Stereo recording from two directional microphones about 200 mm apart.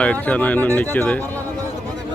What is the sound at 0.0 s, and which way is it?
Speech, 5° left (ahead or behind).